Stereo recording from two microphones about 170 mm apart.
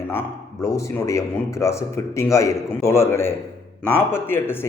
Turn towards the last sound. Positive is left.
turn(degrees=15)  # may be behind; listen again after turning